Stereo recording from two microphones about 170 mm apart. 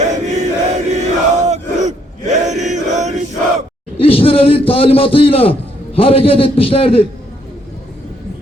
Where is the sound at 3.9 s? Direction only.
35° left (ahead or behind).